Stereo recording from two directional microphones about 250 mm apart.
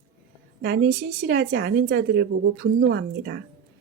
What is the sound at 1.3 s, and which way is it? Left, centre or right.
Speech, right.